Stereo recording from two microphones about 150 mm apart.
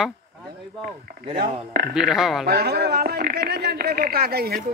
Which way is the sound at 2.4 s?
90° right.